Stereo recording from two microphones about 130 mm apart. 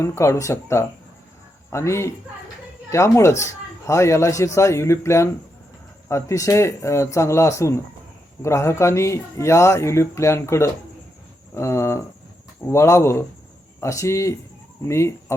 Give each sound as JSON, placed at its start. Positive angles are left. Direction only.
{"t": 0.0, "sound": "a man's voice", "side_deg": 20}